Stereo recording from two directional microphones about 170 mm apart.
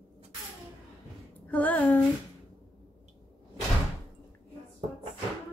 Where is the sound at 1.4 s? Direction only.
10° left (ahead or behind).